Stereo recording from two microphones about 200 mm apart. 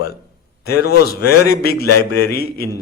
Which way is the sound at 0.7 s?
50° left (ahead or behind).